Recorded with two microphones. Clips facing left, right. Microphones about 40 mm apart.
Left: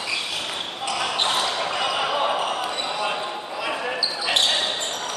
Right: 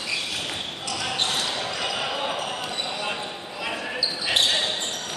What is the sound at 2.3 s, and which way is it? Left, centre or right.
Basketball bounce, left.